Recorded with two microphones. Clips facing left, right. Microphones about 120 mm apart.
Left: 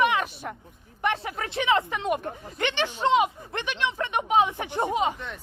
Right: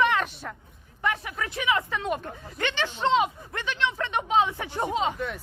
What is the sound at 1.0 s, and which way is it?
Speech, 30° left (ahead or behind).